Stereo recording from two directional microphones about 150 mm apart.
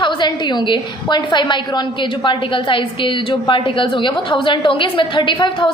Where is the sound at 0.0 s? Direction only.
30° left (ahead or behind).